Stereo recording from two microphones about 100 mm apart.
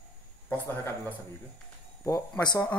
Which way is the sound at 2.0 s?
30° left (ahead or behind).